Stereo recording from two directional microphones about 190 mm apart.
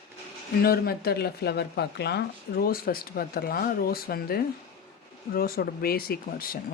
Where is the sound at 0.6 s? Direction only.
55° left (ahead or behind).